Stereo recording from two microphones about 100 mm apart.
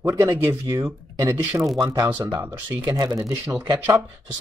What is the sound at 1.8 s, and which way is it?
Speech, 35° right (ahead or behind).